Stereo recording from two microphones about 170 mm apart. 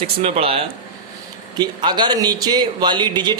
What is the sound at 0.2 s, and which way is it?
Speech, 35° right (ahead or behind).